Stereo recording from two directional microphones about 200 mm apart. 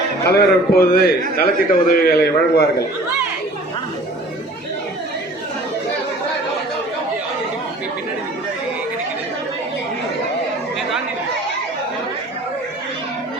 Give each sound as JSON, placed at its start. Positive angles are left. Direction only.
{"t": 0.3, "sound": "a man's voice", "side_deg": 50}